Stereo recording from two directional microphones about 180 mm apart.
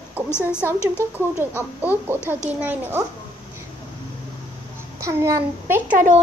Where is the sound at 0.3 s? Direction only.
15° left (ahead or behind).